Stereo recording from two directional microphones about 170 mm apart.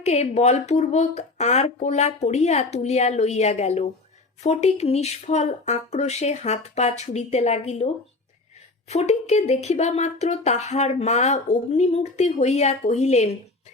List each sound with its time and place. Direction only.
0.0 s speech: 40° left (ahead or behind)
8.9 s speech: 40° left (ahead or behind)